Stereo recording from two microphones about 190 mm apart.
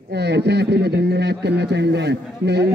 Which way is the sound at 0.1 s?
60° right (ahead or behind).